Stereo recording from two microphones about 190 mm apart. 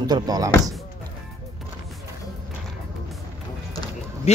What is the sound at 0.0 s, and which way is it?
Speech, 20° right (ahead or behind).